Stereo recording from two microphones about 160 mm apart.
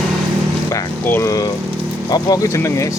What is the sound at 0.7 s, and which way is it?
Vehicle, 15° left (ahead or behind).